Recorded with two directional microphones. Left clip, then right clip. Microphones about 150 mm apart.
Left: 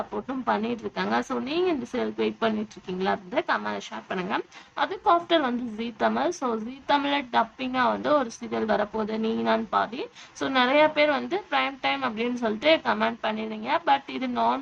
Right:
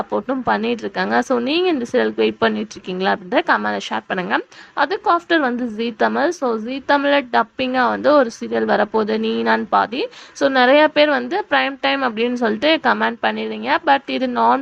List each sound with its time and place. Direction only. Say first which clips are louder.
0.3 s a woman's voice: right 6 dB; 45° right (ahead or behind)